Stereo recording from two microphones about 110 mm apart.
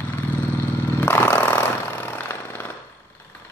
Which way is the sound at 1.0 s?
15° left (ahead or behind).